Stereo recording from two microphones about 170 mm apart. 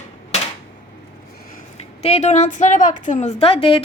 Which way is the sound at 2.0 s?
40° left (ahead or behind).